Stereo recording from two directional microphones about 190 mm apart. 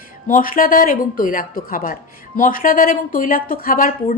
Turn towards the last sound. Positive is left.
turn(degrees=50)  # may be behind; listen again after turning